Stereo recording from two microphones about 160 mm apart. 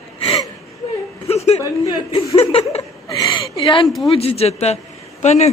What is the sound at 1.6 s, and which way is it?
Chuckle, 20° left (ahead or behind).